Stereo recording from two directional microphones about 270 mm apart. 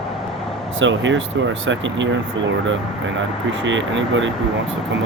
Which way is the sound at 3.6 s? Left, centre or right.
Right.